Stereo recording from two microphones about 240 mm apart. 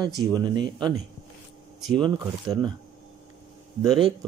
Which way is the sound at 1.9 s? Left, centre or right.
Centre.